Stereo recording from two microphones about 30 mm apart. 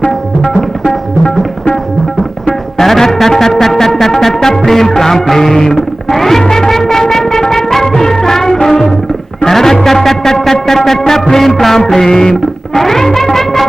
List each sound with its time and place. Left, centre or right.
2.7 s music: centre